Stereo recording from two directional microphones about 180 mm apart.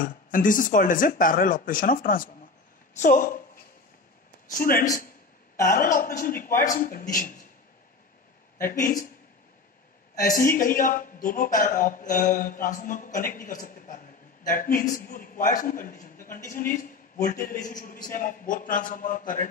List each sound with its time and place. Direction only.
0.0 s a woman's voice: 50° left (ahead or behind)
4.5 s a woman's voice: 50° left (ahead or behind)
8.6 s a woman's voice: 50° left (ahead or behind)
10.3 s a woman's voice: 50° left (ahead or behind)